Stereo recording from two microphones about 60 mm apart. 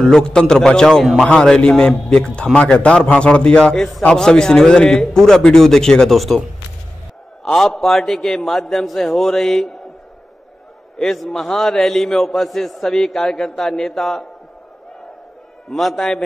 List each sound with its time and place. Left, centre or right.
0.0 s a man's voice: centre
7.4 s a man's voice: centre
11.0 s a man's voice: centre
15.7 s a man's voice: centre